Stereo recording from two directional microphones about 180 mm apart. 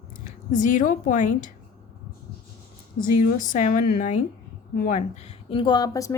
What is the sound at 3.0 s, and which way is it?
A woman's voice, 45° left (ahead or behind).